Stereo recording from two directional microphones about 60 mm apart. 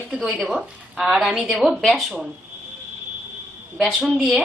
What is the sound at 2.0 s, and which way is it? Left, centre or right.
Speech, centre.